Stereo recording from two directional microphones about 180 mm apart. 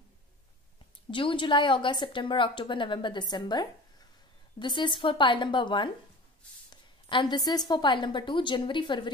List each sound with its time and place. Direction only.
1.1 s a woman's voice: 25° left (ahead or behind)